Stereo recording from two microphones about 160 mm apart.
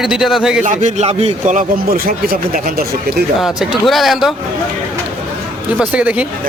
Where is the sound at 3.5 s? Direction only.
Centre (ahead or behind).